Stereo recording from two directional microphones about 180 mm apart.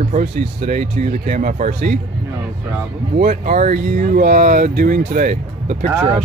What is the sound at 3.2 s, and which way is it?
Speech, 55° right (ahead or behind).